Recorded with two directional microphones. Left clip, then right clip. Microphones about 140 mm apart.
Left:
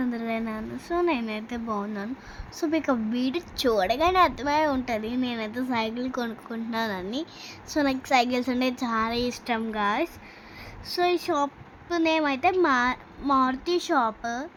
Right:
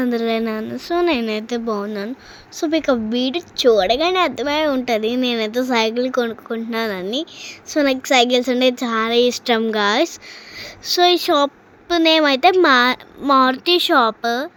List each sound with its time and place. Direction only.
0.0 s a woman's voice: 35° right (ahead or behind)